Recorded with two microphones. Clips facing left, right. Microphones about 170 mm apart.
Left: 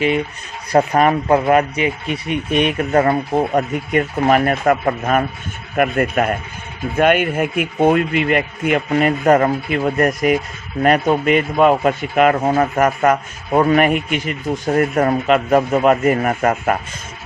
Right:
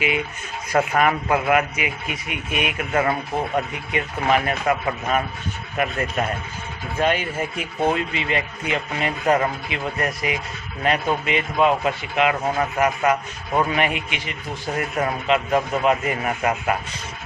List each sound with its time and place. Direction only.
0.7 s speech: 35° left (ahead or behind)